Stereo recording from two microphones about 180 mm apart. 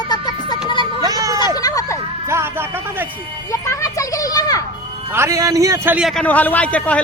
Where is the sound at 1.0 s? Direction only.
20° right (ahead or behind).